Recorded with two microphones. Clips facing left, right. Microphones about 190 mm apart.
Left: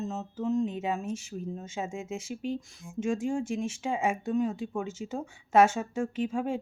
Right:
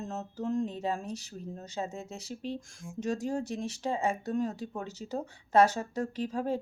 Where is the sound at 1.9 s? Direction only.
35° right (ahead or behind).